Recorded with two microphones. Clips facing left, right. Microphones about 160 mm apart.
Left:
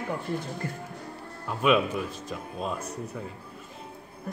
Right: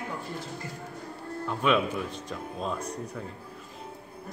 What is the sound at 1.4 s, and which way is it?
A man's voice, 5° left (ahead or behind).